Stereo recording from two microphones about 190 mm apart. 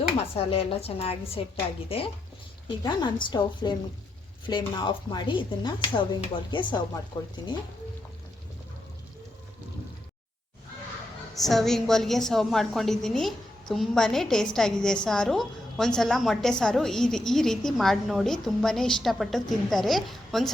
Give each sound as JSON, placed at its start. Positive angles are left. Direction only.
{"t": 0.3, "sound": "a woman's voice", "side_deg": 30}
{"t": 11.3, "sound": "a woman's voice", "side_deg": 0}